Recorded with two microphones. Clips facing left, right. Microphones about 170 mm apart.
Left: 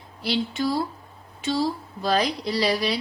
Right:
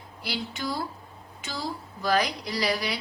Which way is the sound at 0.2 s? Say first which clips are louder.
Left 8 dB; 25° left (ahead or behind).